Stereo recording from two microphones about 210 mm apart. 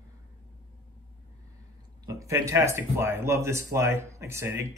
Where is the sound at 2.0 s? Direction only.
15° right (ahead or behind).